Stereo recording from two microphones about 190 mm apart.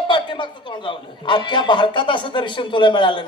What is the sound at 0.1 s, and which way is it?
A man's voice, 25° left (ahead or behind).